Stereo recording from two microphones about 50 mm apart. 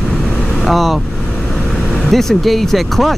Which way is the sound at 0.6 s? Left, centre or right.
Centre.